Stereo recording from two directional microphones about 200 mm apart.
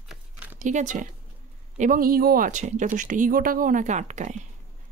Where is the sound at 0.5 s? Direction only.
40° right (ahead or behind).